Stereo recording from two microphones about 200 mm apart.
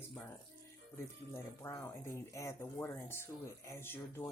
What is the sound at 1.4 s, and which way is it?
Speech, 15° left (ahead or behind).